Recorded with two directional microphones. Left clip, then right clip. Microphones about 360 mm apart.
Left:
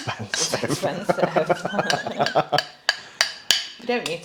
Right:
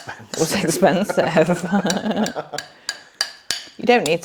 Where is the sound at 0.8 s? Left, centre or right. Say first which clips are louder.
Right 15 dB; right.